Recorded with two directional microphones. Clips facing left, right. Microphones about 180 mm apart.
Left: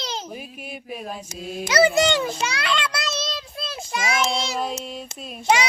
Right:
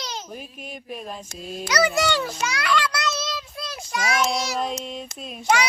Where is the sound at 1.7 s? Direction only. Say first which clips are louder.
Left 4 dB; 25° left (ahead or behind).